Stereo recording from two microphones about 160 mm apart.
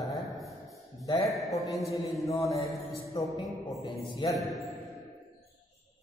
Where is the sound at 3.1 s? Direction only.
25° left (ahead or behind).